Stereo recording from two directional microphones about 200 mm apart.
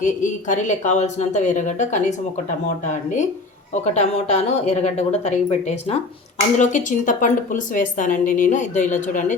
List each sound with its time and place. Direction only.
0.0 s a woman's voice: 40° left (ahead or behind)